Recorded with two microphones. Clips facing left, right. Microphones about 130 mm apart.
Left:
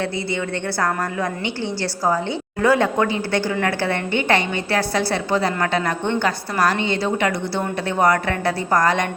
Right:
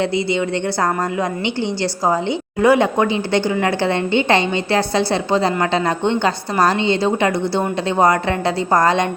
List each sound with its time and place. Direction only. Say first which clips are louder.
2.6 s a woman's voice: right 3 dB; 15° right (ahead or behind)